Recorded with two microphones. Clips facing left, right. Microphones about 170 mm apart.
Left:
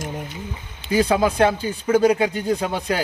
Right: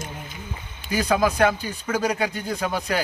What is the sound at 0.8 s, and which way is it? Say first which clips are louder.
Speech: left 3 dB; 25° left (ahead or behind).